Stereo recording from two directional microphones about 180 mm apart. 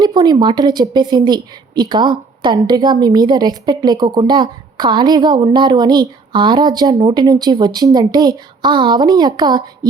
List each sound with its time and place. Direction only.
0.0 s a woman's voice: 20° right (ahead or behind)